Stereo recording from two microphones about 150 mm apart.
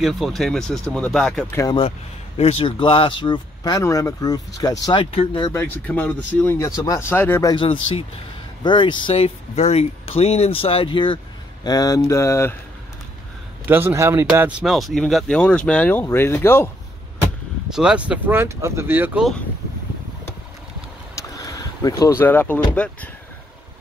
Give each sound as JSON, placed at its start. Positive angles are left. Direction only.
{"t": 0.0, "sound": "speech", "side_deg": 0}
{"t": 1.5, "sound": "speech", "side_deg": 20}
{"t": 1.8, "sound": "speech", "side_deg": 40}
{"t": 5.5, "sound": "speech", "side_deg": 15}
{"t": 7.5, "sound": "speech", "side_deg": 35}
{"t": 13.7, "sound": "speech", "side_deg": -15}
{"t": 14.6, "sound": "speech", "side_deg": 0}
{"t": 17.6, "sound": "speech", "side_deg": -5}
{"t": 21.1, "sound": "speech", "side_deg": 20}